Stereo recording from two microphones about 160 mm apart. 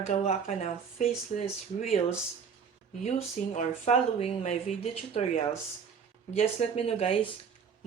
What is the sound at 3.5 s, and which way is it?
Speech, 45° left (ahead or behind).